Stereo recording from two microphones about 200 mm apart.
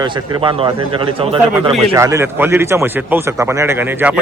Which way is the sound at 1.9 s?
15° right (ahead or behind).